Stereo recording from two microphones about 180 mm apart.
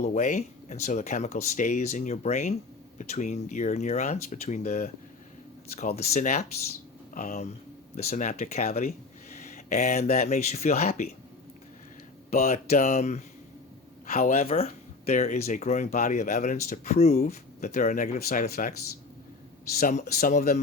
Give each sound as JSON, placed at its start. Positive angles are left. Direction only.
{"t": 0.0, "sound": "speech", "side_deg": 40}
{"t": 5.7, "sound": "speech", "side_deg": 55}
{"t": 6.1, "sound": "speech", "side_deg": 40}
{"t": 9.3, "sound": "a sound", "side_deg": 40}
{"t": 10.2, "sound": "speech", "side_deg": 40}
{"t": 12.3, "sound": "speech", "side_deg": 55}
{"t": 12.8, "sound": "speech", "side_deg": 40}
{"t": 14.1, "sound": "speech", "side_deg": 50}
{"t": 14.4, "sound": "speech", "side_deg": 35}
{"t": 19.8, "sound": "speech", "side_deg": 45}